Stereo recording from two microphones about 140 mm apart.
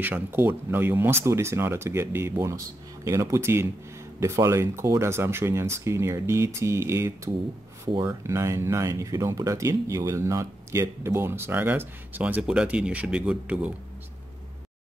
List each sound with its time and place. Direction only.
0.0 s speech: 15° right (ahead or behind)